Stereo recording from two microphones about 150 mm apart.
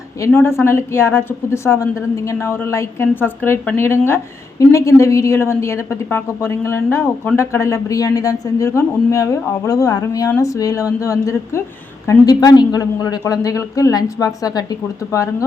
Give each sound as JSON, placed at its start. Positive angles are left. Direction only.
{"t": 0.3, "sound": "a woman's voice", "side_deg": 15}